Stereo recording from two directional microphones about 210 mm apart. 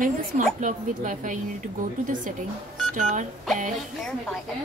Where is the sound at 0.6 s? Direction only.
35° right (ahead or behind).